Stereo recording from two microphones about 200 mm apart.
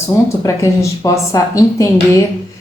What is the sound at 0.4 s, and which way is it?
Speech, 15° left (ahead or behind).